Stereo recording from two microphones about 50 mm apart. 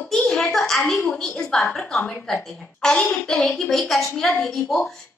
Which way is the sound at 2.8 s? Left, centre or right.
Centre.